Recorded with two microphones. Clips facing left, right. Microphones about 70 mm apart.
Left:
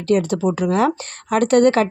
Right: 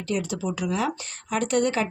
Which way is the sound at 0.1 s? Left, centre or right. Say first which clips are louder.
Left 10 dB; left.